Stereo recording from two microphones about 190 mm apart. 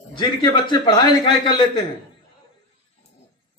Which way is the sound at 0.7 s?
25° left (ahead or behind).